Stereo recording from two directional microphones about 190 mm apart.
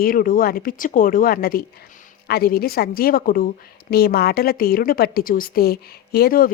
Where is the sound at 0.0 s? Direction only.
50° left (ahead or behind).